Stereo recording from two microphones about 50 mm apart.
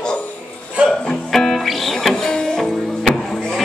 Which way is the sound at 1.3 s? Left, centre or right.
Centre.